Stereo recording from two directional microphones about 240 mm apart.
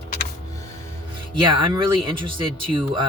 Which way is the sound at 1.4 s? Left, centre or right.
Centre.